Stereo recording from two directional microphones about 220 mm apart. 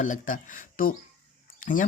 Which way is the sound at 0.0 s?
35° left (ahead or behind).